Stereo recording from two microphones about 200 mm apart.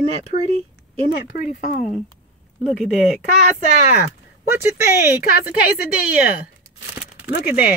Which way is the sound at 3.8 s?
45° left (ahead or behind).